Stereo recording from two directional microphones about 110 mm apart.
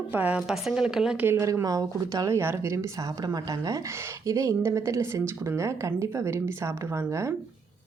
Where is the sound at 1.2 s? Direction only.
25° right (ahead or behind).